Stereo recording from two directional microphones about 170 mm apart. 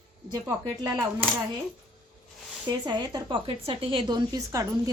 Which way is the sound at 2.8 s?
25° right (ahead or behind).